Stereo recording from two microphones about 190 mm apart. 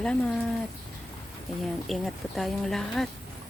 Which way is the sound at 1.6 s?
Centre (ahead or behind).